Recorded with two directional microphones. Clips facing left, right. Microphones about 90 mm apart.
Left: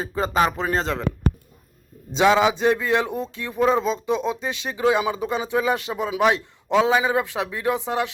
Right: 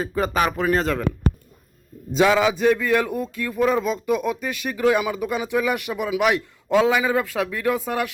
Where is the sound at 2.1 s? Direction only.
25° left (ahead or behind).